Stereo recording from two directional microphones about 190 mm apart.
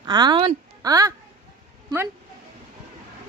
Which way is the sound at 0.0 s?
20° right (ahead or behind).